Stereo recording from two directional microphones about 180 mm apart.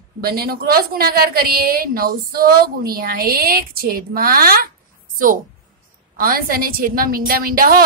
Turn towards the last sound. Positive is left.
turn(degrees=-55)  # may be behind; listen again after turning